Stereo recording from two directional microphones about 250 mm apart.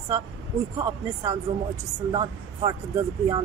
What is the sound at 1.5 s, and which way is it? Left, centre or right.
A woman's voice, centre.